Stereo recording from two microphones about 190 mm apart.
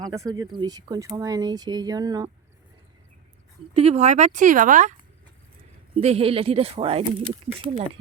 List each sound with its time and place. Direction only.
0.0 s speech: 20° right (ahead or behind)
3.8 s speech: 35° right (ahead or behind)
6.0 s speech: 35° right (ahead or behind)